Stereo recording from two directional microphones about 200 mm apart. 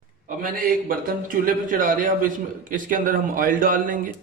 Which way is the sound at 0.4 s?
45° right (ahead or behind).